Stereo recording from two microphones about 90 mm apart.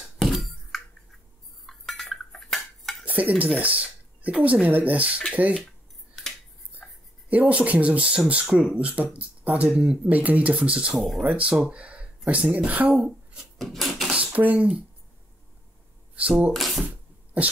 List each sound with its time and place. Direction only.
0.2 s a sound: centre (ahead or behind)
1.7 s cutlery: 5° left (ahead or behind)
3.1 s speech: 20° right (ahead or behind)
7.2 s speech: 15° right (ahead or behind)
11.0 s speech: centre (ahead or behind)
11.2 s speech: 15° right (ahead or behind)
13.6 s a sound: centre (ahead or behind)
14.1 s a sound: 15° right (ahead or behind)
16.2 s speech: 15° right (ahead or behind)
16.5 s speech: centre (ahead or behind)